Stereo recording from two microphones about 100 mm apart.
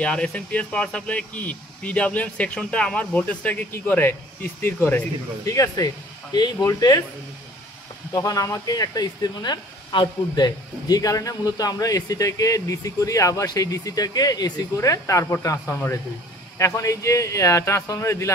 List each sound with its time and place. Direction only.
0.0 s speech: 10° left (ahead or behind)
5.4 s speech: 35° left (ahead or behind)
8.1 s speech: 35° left (ahead or behind)